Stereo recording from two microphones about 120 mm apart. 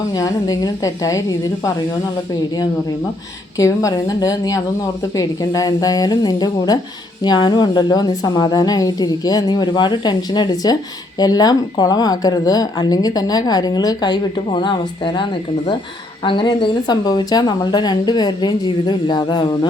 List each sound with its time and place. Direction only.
0.2 s a woman's voice: 35° left (ahead or behind)
3.6 s a woman's voice: 25° left (ahead or behind)